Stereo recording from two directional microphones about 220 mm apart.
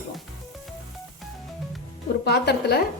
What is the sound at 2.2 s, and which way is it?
Speech, 50° left (ahead or behind).